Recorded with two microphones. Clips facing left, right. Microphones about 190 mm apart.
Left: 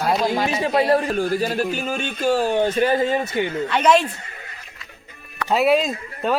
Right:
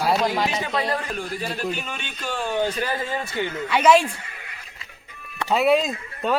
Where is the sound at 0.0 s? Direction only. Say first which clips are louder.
Left 1 dB; 5° right (ahead or behind).